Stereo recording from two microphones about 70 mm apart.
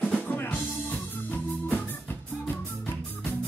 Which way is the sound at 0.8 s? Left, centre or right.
Left.